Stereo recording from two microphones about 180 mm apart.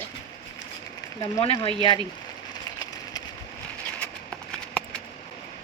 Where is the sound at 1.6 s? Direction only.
25° left (ahead or behind).